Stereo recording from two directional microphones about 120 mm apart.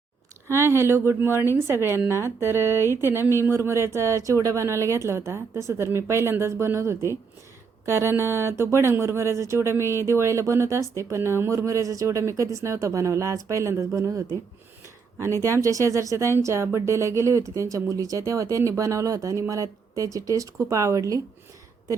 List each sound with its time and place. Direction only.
0.4 s speech: 20° right (ahead or behind)
15.4 s speech: 25° right (ahead or behind)